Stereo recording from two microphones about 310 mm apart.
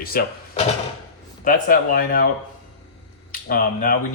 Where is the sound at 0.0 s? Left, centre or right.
Left.